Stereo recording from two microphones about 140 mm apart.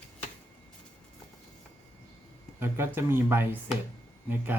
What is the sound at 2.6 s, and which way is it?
Speech, 15° right (ahead or behind).